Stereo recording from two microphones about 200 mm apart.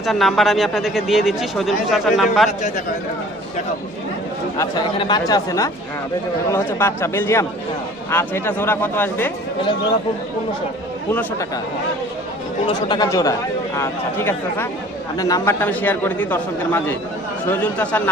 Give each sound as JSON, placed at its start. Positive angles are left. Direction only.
{"t": 0.0, "sound": "speech", "side_deg": 0}
{"t": 2.5, "sound": "a man's voice", "side_deg": 35}
{"t": 4.9, "sound": "a man's voice", "side_deg": 20}
{"t": 11.1, "sound": "a man's voice", "side_deg": 15}
{"t": 12.6, "sound": "a man's voice", "side_deg": 20}